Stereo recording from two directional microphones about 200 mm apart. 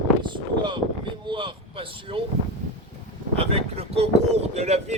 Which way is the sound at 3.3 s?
30° right (ahead or behind).